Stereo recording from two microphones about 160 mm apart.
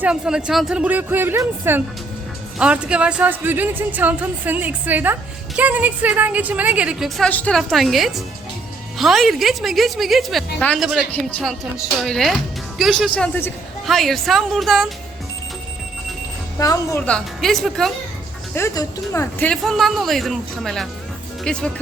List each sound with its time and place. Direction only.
0.0 s a woman's voice: 5° right (ahead or behind)
7.2 s speech: 10° left (ahead or behind)
16.6 s speech: 20° left (ahead or behind)
17.1 s speech: 5° left (ahead or behind)
18.5 s speech: 20° left (ahead or behind); by 21.7 s 5° left (ahead or behind)